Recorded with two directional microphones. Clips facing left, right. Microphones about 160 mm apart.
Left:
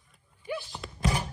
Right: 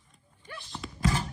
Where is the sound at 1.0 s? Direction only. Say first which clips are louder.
Right 1 dB; 15° left (ahead or behind).